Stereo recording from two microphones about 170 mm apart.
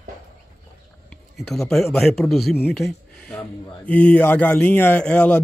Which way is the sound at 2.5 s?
10° left (ahead or behind).